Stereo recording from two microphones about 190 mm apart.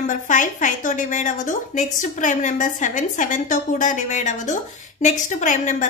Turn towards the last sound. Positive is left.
turn(degrees=40)  # may be behind; listen again after turning